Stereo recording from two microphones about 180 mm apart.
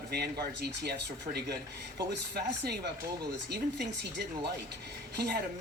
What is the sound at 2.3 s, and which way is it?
Speech, 65° right (ahead or behind).